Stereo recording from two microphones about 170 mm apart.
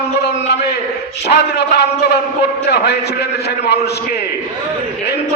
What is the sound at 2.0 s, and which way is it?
Speech, 70° left (ahead or behind).